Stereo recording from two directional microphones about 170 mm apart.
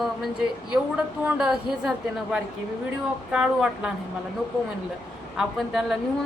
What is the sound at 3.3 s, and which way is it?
Speech, 5° right (ahead or behind).